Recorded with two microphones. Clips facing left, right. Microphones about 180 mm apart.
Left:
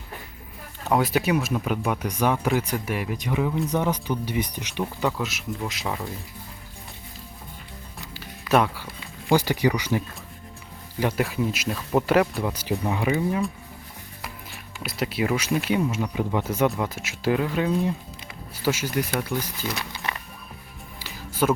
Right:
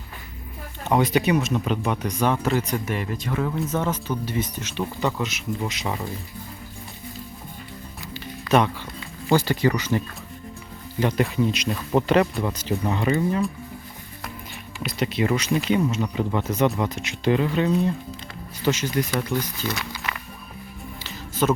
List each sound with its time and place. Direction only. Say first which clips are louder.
0.9 s speech: right 2 dB; centre (ahead or behind)
8.1 s music: right 1 dB; 5° left (ahead or behind)
9.3 s speech: right 1 dB; 10° left (ahead or behind)
11.0 s speech: right 2 dB; 5° left (ahead or behind)
21.0 s music: even; 10° left (ahead or behind)